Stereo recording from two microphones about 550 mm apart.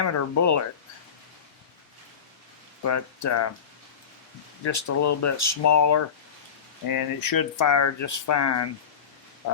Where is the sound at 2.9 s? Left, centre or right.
Left.